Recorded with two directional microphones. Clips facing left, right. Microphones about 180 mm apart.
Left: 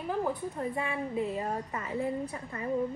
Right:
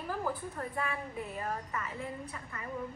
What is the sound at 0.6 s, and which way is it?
A woman's voice, 25° left (ahead or behind).